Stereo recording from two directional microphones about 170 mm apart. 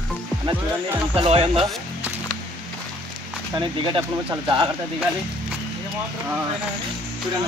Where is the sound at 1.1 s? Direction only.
35° right (ahead or behind).